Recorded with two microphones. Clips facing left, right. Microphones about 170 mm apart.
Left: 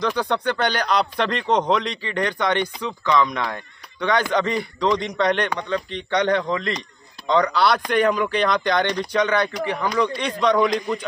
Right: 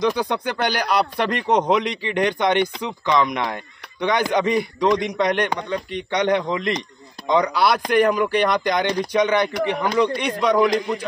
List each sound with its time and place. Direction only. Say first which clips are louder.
0.0 s speech: right 1 dB; 15° right (ahead or behind)
10.2 s speech: right 1 dB; 5° right (ahead or behind)